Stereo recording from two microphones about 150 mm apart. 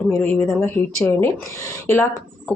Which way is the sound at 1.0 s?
15° left (ahead or behind).